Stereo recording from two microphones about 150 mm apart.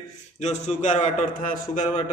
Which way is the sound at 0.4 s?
55° left (ahead or behind).